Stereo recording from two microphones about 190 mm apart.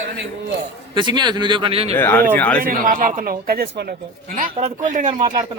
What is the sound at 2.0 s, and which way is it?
Speech, 10° left (ahead or behind).